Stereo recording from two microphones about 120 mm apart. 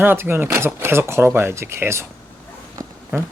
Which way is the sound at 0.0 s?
20° right (ahead or behind).